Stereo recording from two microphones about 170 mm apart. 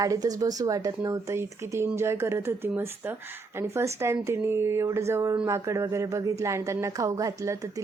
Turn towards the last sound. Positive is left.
turn(degrees=-20)  # may be behind; listen again after turning